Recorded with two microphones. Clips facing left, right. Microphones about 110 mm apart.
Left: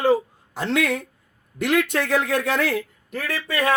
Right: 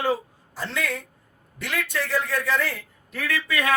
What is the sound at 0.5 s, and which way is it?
A man's voice, 70° left (ahead or behind).